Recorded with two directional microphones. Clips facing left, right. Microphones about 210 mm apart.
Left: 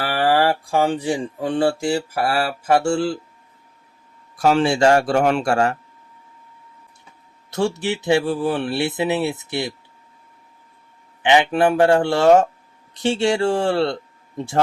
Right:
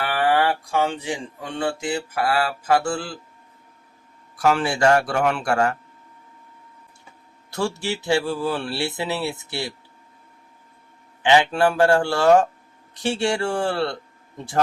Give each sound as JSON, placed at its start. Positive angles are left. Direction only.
{"t": 0.0, "sound": "speech", "side_deg": 30}
{"t": 4.4, "sound": "speech", "side_deg": 25}
{"t": 7.5, "sound": "speech", "side_deg": 20}
{"t": 11.2, "sound": "speech", "side_deg": 20}